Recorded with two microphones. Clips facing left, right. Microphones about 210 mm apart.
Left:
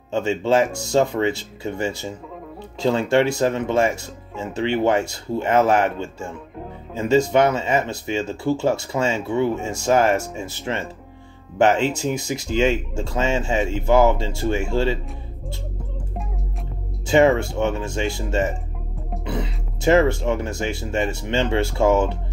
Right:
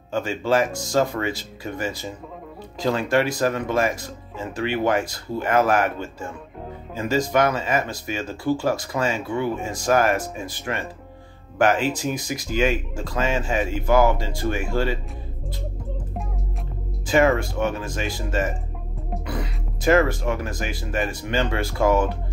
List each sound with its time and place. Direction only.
0.1 s speech: 25° left (ahead or behind)
17.0 s music: 25° left (ahead or behind)
17.4 s speech: 25° left (ahead or behind)